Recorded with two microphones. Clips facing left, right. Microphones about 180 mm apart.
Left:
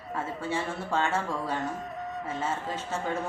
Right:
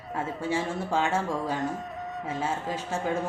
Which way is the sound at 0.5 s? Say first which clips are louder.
Right 2 dB; 15° right (ahead or behind).